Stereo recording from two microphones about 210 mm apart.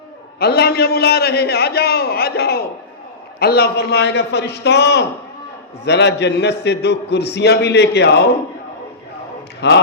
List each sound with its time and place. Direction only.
0.3 s a man's voice: 50° left (ahead or behind)
9.6 s a man's voice: 55° left (ahead or behind)